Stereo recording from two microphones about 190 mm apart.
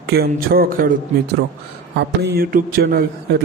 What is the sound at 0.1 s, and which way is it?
Speech, 55° right (ahead or behind).